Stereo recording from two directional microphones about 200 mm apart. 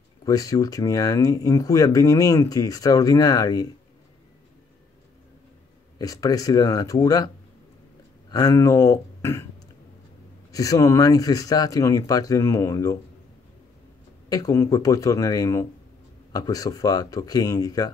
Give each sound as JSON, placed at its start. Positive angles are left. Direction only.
{"t": 0.2, "sound": "speech", "side_deg": 15}
{"t": 5.9, "sound": "speech", "side_deg": 20}
{"t": 8.3, "sound": "speech", "side_deg": 20}
{"t": 10.5, "sound": "speech", "side_deg": 15}
{"t": 14.3, "sound": "speech", "side_deg": 15}